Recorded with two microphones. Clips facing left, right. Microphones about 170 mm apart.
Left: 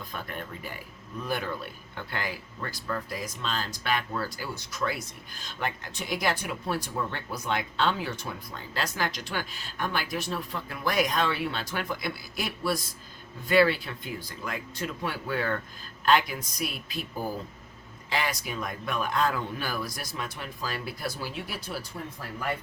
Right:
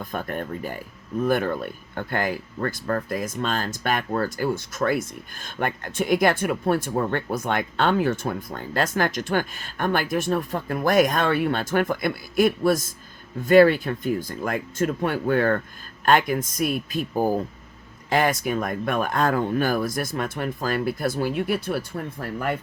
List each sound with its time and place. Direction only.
0.0 s speech: 50° right (ahead or behind)